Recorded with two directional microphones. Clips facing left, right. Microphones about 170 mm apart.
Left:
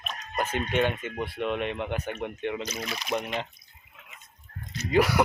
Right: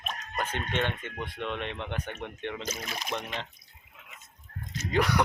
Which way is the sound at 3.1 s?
5° left (ahead or behind).